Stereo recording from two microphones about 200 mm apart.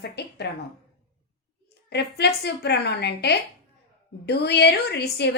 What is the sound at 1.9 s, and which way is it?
A woman's voice, 55° left (ahead or behind).